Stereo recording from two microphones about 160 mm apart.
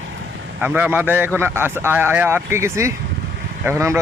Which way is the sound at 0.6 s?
10° right (ahead or behind).